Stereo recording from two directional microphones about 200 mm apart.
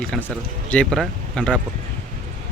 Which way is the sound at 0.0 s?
5° left (ahead or behind).